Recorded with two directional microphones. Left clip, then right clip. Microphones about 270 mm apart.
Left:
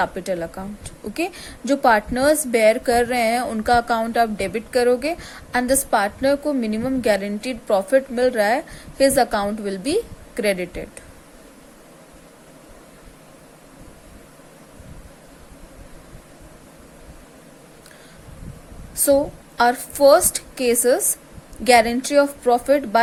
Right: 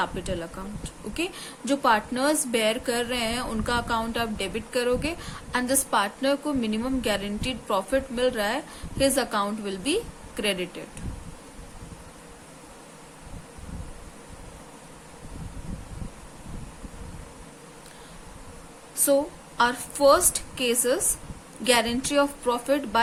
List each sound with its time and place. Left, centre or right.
0.0 s a woman's voice: left
18.9 s a woman's voice: centre